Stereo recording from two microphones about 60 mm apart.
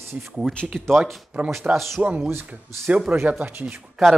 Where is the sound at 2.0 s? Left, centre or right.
Right.